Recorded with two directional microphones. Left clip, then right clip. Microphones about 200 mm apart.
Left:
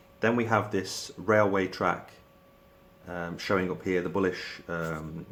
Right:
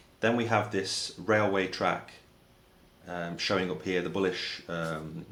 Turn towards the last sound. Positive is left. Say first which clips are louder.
# even
turn(degrees=35)  # may be behind; listen again after turning